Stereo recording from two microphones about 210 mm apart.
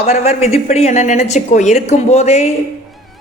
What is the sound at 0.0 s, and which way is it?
Speech, 30° left (ahead or behind).